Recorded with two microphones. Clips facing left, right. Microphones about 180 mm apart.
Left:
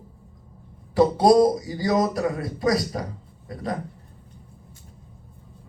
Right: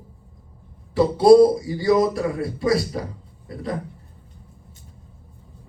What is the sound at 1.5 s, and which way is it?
A man's voice, 25° right (ahead or behind).